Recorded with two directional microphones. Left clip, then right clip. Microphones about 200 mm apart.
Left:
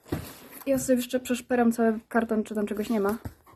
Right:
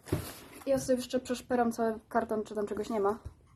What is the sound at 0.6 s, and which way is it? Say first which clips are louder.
A woman's voice: left 4 dB; 35° left (ahead or behind).